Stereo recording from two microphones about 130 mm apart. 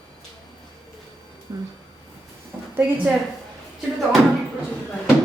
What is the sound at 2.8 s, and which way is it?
Speech, 15° right (ahead or behind).